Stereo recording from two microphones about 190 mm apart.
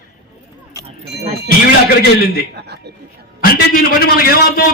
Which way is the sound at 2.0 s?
55° left (ahead or behind).